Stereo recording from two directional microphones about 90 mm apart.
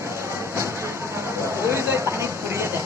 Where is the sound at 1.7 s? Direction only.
30° right (ahead or behind).